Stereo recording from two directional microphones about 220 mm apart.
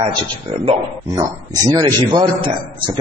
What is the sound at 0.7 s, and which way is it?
A man's voice, 15° right (ahead or behind).